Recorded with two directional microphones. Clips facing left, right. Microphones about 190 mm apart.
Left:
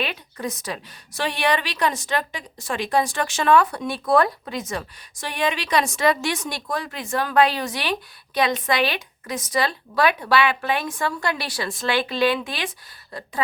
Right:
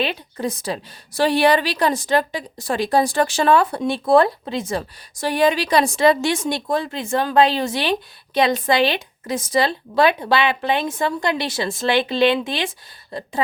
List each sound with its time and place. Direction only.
0.0 s a woman's voice: 30° right (ahead or behind)